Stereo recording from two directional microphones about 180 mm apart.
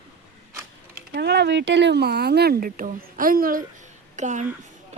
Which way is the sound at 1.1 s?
65° right (ahead or behind).